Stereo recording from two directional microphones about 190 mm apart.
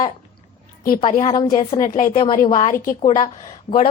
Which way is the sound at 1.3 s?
20° left (ahead or behind).